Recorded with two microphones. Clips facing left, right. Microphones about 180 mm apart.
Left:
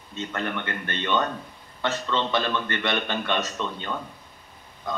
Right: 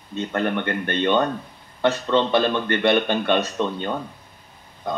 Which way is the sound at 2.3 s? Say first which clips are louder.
Right 6 dB; 40° right (ahead or behind).